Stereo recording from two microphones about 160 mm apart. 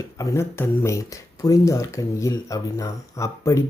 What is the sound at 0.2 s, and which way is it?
Speech, 15° left (ahead or behind).